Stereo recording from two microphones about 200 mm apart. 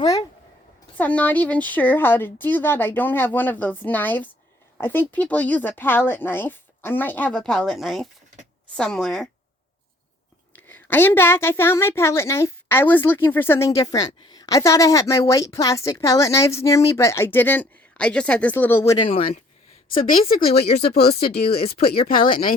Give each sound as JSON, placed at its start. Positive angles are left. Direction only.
{"t": 0.0, "sound": "a sound", "side_deg": 20}
{"t": 0.9, "sound": "a woman's voice", "side_deg": 10}
{"t": 10.5, "sound": "a woman's voice", "side_deg": 10}
{"t": 18.9, "sound": "speech", "side_deg": 25}
{"t": 20.7, "sound": "speech", "side_deg": 55}